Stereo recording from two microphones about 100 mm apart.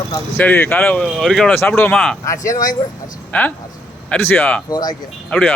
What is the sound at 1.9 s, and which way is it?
Speech, 5° left (ahead or behind).